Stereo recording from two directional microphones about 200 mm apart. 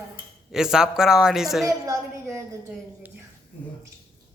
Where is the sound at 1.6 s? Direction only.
15° right (ahead or behind).